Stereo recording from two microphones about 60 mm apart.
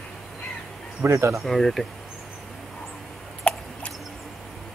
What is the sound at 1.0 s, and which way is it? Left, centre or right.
Speech, right.